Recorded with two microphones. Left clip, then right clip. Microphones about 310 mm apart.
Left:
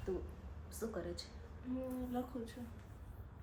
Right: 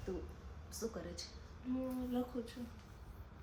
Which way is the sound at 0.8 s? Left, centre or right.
Centre.